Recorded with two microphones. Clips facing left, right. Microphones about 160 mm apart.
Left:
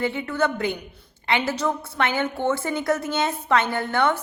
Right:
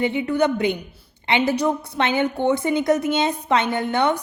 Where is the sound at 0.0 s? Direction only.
15° right (ahead or behind).